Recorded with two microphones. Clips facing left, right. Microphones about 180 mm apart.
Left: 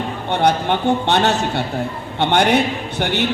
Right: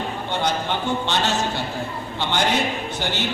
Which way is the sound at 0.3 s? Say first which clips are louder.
Left 8 dB; 60° left (ahead or behind).